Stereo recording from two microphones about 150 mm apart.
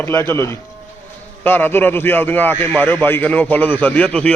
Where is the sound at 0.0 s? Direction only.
15° left (ahead or behind).